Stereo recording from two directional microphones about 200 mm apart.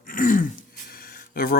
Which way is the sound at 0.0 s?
45° left (ahead or behind).